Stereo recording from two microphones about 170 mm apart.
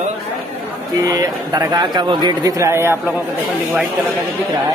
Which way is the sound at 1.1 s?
20° right (ahead or behind).